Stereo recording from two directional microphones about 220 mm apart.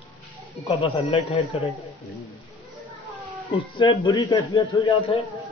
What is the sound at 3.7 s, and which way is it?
Speech, 20° left (ahead or behind).